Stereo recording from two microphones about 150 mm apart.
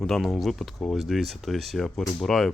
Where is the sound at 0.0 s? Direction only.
Centre (ahead or behind).